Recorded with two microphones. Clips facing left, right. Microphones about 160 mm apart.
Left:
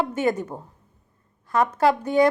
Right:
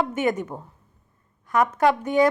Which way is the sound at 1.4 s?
30° left (ahead or behind).